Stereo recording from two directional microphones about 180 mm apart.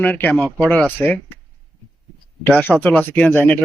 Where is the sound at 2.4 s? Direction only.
10° left (ahead or behind).